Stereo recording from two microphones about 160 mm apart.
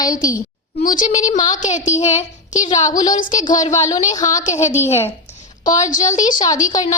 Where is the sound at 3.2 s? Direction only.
55° left (ahead or behind).